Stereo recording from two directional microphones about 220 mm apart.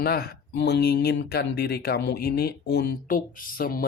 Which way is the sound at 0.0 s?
45° left (ahead or behind).